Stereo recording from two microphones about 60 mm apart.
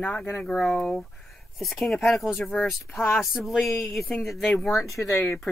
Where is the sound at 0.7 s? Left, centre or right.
Centre.